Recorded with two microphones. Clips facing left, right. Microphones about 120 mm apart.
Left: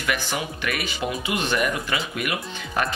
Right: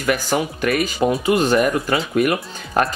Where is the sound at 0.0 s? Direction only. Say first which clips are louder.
Right 7 dB; 40° right (ahead or behind).